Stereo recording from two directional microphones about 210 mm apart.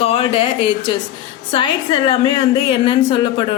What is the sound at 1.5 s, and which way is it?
A woman's voice, 25° left (ahead or behind).